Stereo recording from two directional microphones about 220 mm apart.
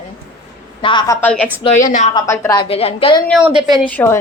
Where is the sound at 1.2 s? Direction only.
5° left (ahead or behind).